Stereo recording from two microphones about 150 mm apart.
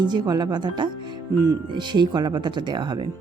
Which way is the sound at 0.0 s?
30° right (ahead or behind).